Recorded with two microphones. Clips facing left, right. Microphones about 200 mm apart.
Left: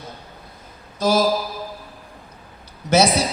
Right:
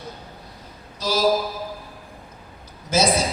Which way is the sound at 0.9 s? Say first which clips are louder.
Left 6 dB; 50° left (ahead or behind).